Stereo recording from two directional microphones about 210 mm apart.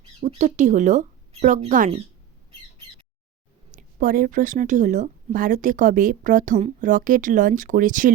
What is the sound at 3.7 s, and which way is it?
Speech, 40° right (ahead or behind).